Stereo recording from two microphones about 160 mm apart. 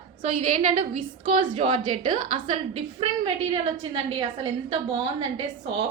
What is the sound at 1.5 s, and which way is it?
A woman's voice, 35° right (ahead or behind).